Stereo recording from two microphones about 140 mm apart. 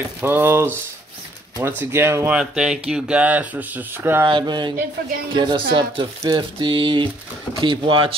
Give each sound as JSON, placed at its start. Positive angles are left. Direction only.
{"t": 0.2, "sound": "speech", "side_deg": -15}
{"t": 1.8, "sound": "speech", "side_deg": -15}
{"t": 2.3, "sound": "speech", "side_deg": -5}
{"t": 4.3, "sound": "speech", "side_deg": -35}